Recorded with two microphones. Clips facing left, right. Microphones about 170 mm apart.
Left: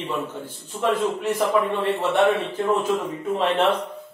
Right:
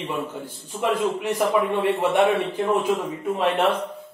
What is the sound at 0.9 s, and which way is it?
Speech, 10° right (ahead or behind).